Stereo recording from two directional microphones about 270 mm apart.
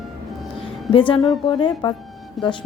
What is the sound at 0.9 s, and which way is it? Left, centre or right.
A woman's voice, centre.